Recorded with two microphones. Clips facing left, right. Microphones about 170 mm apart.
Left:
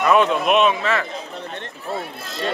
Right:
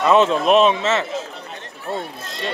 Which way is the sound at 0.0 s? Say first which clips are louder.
Right 2 dB; 25° right (ahead or behind).